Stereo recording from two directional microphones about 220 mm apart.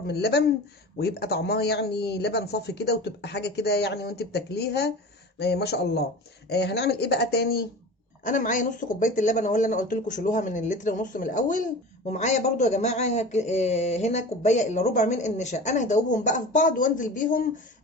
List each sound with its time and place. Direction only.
0.1 s speech: 45° left (ahead or behind)
8.2 s speech: 35° left (ahead or behind)